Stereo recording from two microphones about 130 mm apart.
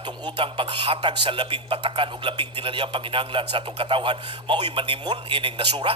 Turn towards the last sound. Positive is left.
turn(degrees=-40)  # may be behind; listen again after turning